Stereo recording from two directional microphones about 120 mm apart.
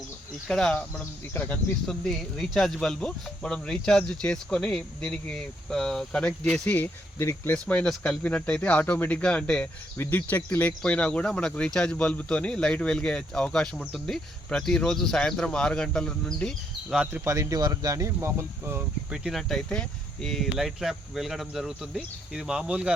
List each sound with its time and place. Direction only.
0.4 s speech: 5° left (ahead or behind)
7.7 s speech: 5° left (ahead or behind)
10.0 s speech: 20° left (ahead or behind)
17.0 s speech: 15° right (ahead or behind)
17.2 s speech: 25° right (ahead or behind)
19.1 s speech: 5° right (ahead or behind)